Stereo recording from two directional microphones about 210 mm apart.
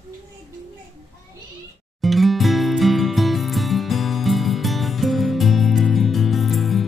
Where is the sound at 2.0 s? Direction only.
Centre (ahead or behind).